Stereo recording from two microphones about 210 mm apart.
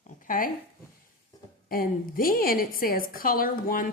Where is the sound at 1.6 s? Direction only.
45° left (ahead or behind).